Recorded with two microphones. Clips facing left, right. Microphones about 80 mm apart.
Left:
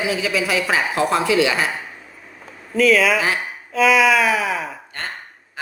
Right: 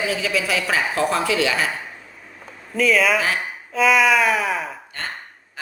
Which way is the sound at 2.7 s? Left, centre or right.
Centre.